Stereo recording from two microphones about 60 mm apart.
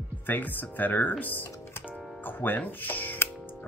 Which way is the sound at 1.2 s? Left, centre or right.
Left.